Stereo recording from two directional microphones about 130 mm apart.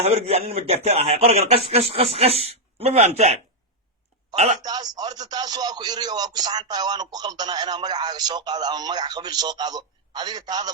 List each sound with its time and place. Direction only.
0.0 s speech: 55° right (ahead or behind)
4.6 s speech: 30° right (ahead or behind)